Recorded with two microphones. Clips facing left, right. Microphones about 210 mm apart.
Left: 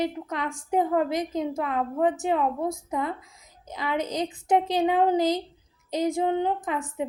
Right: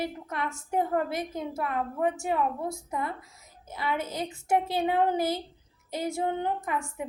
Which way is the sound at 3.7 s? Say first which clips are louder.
Left 3 dB; 15° left (ahead or behind).